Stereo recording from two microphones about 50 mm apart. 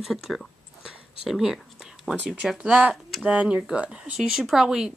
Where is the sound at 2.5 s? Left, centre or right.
Right.